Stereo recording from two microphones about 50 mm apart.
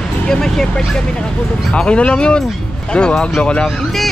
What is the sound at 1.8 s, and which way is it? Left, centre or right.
Speech, left.